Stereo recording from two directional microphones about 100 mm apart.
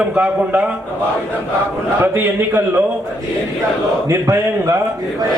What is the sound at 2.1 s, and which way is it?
Speech, 20° right (ahead or behind).